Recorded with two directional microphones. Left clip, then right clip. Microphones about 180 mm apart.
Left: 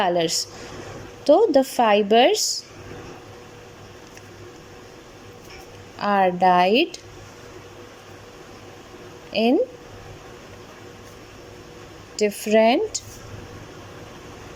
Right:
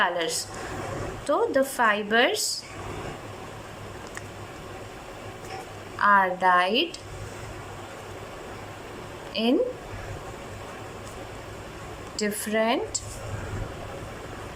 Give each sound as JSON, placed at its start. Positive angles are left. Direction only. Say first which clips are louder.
{"t": 0.0, "sound": "a woman's voice", "louder": "left 4 dB", "side_deg": 20}
{"t": 6.0, "sound": "a woman's voice", "louder": "left 1 dB", "side_deg": 25}
{"t": 9.3, "sound": "speech", "louder": "left 5 dB", "side_deg": 20}
{"t": 12.2, "sound": "a woman's voice", "louder": "left 8 dB", "side_deg": 20}